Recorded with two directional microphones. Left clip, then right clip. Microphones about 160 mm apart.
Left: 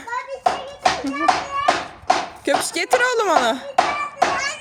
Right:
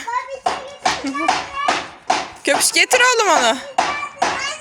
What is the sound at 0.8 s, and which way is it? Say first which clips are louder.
Hands: even; centre (ahead or behind).